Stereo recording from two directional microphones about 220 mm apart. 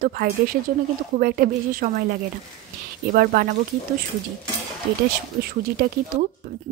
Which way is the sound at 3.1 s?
40° right (ahead or behind).